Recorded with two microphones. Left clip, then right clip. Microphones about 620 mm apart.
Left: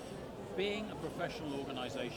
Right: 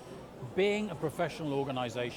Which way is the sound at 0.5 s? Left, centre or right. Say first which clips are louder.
Right 8 dB; right.